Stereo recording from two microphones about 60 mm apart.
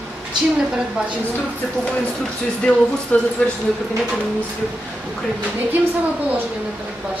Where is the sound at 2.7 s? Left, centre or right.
Centre.